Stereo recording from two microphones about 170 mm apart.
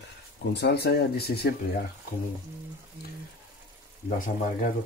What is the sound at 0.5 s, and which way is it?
Speech, 75° left (ahead or behind).